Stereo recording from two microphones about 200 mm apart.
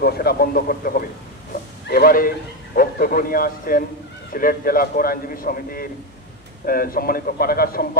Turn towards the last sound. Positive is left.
turn(degrees=45)  # may be behind; listen again after turning